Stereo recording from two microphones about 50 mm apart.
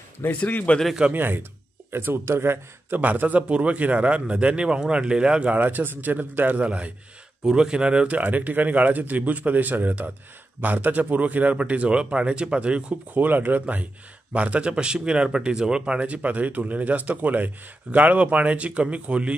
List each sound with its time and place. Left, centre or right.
0.3 s speech: left
1.1 s speech: right
3.0 s a man's voice: right; by 5.5 s centre
5.5 s a man's voice: right; by 8.2 s centre
8.2 s a man's voice: right
13.1 s a man's voice: right